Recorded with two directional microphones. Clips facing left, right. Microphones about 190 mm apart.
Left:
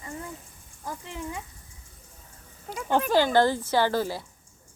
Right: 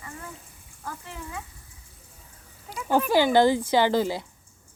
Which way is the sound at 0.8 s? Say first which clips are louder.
Left 3 dB; 15° left (ahead or behind).